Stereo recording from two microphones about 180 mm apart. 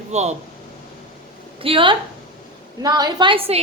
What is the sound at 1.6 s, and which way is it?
A woman's voice, 30° right (ahead or behind).